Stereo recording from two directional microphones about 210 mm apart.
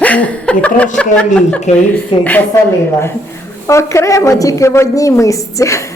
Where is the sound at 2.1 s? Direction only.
25° left (ahead or behind).